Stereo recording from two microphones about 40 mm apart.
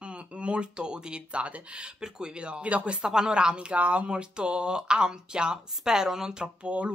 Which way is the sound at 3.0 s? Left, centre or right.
Centre.